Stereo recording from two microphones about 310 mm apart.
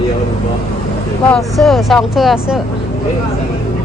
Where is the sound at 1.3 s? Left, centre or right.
Centre.